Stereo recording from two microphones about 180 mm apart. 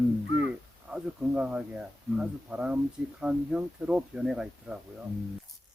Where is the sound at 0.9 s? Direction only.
5° right (ahead or behind).